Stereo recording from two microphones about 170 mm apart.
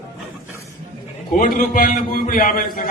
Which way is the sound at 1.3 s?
55° left (ahead or behind).